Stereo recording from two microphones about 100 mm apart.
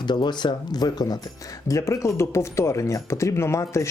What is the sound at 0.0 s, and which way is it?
Speech, 50° left (ahead or behind).